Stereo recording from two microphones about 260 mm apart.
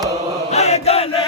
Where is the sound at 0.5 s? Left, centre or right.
Left.